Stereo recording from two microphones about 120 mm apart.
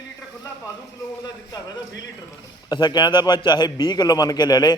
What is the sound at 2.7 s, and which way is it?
A man's voice, 40° left (ahead or behind).